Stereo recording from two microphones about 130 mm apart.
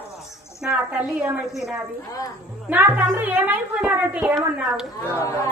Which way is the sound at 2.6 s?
15° right (ahead or behind).